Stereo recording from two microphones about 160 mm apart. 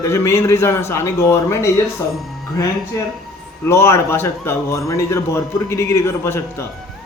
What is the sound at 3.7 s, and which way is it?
Speech, 15° left (ahead or behind).